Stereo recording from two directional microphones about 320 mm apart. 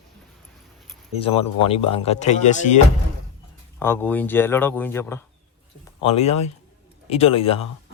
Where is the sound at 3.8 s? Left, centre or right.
Centre.